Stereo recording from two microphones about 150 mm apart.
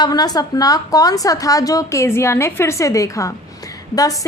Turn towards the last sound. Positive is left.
turn(degrees=25)  # may be behind; listen again after turning